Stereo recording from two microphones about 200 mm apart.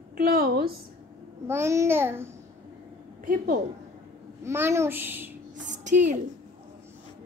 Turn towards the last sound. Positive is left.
turn(degrees=-35)  # may be behind; listen again after turning